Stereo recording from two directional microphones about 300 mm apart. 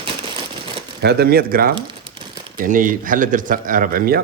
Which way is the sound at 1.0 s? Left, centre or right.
Right.